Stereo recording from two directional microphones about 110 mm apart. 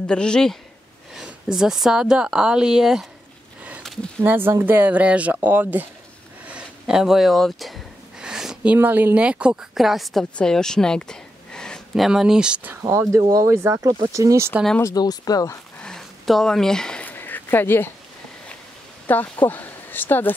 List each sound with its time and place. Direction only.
0.0 s a man's voice: 10° left (ahead or behind)
1.1 s a woman's voice: 5° right (ahead or behind)
3.8 s a sound: centre (ahead or behind)
4.2 s speech: 20° right (ahead or behind)
6.4 s gasp: 10° right (ahead or behind)
8.7 s speech: 20° right (ahead or behind); by 11.8 s 5° left (ahead or behind)
11.9 s speech: 5° right (ahead or behind)
12.8 s speech: 30° right (ahead or behind)
15.0 s speech: 35° left (ahead or behind)
15.8 s a sound: 5° left (ahead or behind); by 17.8 s 20° left (ahead or behind)
19.0 s speech: 15° left (ahead or behind)